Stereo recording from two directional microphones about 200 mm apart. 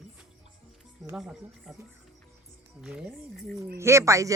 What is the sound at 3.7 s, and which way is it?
Speech, 15° right (ahead or behind).